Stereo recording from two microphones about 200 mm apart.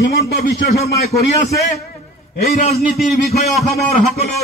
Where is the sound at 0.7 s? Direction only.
30° left (ahead or behind).